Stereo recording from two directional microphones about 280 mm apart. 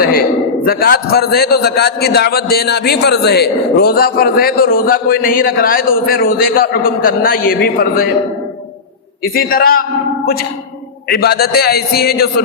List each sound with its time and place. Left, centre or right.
0.6 s a man's voice: left
9.2 s a man's voice: left
11.1 s a man's voice: left